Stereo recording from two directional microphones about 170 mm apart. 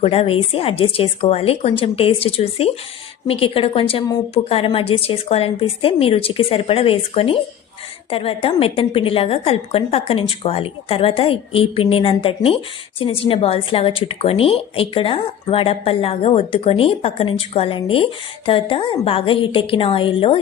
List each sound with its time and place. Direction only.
0.0 s a woman's voice: 35° left (ahead or behind)